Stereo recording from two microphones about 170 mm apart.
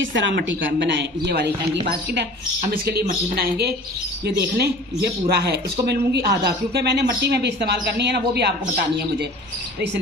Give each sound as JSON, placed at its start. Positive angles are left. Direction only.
{"t": 0.0, "sound": "a woman's voice", "side_deg": -90}
{"t": 2.6, "sound": "speech", "side_deg": -60}